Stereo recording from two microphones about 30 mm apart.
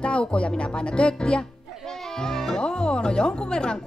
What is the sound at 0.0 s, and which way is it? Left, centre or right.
Speech, left.